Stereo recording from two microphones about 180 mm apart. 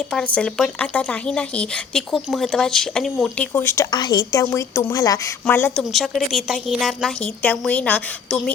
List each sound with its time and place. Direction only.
0.1 s speech: 5° left (ahead or behind)
5.9 s a woman's voice: centre (ahead or behind)